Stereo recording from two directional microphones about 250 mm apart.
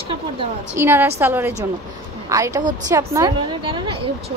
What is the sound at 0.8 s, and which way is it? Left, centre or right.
A woman's voice, centre.